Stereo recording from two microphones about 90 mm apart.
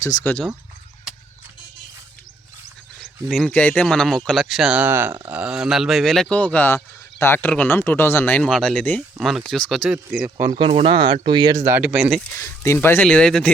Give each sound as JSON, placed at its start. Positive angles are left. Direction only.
{"t": 0.0, "sound": "speech", "side_deg": 45}
{"t": 3.0, "sound": "speech", "side_deg": 5}
{"t": 3.8, "sound": "speech", "side_deg": 5}
{"t": 4.8, "sound": "speech", "side_deg": -20}
{"t": 7.2, "sound": "speech", "side_deg": 25}
{"t": 8.4, "sound": "speech", "side_deg": 5}
{"t": 8.8, "sound": "speech", "side_deg": 20}
{"t": 9.1, "sound": "speech", "side_deg": -5}
{"t": 10.6, "sound": "speech", "side_deg": -90}
{"t": 11.0, "sound": "speech", "side_deg": -55}
{"t": 11.8, "sound": "speech", "side_deg": -10}
{"t": 12.3, "sound": "speech", "side_deg": 30}
{"t": 13.1, "sound": "speech", "side_deg": 10}